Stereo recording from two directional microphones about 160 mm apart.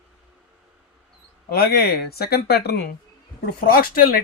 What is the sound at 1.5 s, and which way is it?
Speech, 70° left (ahead or behind).